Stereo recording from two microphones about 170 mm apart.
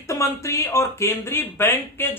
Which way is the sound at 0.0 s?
15° left (ahead or behind).